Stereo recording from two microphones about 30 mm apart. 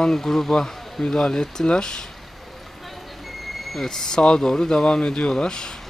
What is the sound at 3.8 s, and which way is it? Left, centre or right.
Speech, centre.